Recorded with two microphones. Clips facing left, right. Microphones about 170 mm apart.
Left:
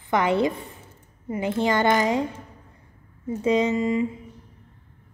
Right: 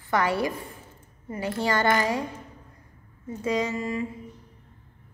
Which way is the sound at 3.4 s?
20° left (ahead or behind).